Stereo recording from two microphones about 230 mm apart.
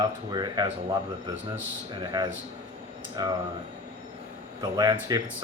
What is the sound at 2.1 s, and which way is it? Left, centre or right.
Speech, centre.